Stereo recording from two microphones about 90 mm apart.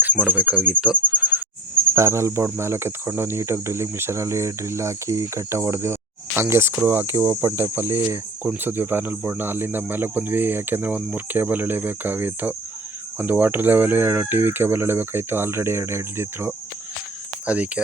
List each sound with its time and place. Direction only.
0.3 s insect: 15° right (ahead or behind)
1.9 s speech: 30° right (ahead or behind)
17.4 s speech: 15° right (ahead or behind)